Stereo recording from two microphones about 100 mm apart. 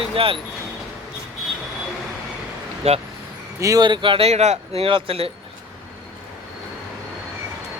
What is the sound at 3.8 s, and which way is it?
Speech, 55° right (ahead or behind).